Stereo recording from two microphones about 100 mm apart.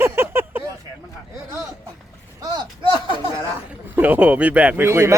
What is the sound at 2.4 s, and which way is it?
Speech, 45° right (ahead or behind).